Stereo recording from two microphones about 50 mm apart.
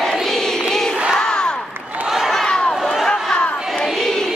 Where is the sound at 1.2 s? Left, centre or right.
Centre.